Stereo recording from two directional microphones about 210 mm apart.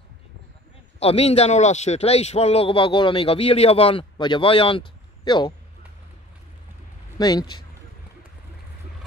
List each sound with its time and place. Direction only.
0.9 s speech: 30° left (ahead or behind)
7.2 s speech: 20° left (ahead or behind)